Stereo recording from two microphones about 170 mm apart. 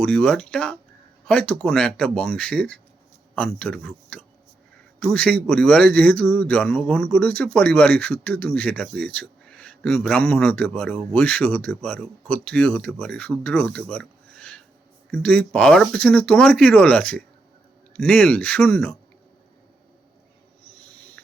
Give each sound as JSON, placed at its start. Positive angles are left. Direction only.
{"t": 0.0, "sound": "a man's voice", "side_deg": 5}